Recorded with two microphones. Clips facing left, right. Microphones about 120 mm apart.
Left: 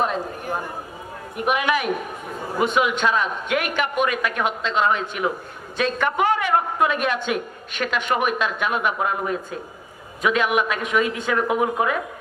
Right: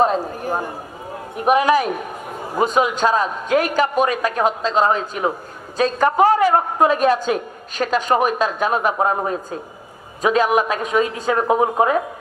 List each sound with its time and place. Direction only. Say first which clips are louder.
0.0 s a woman's voice: right 6 dB; 35° right (ahead or behind)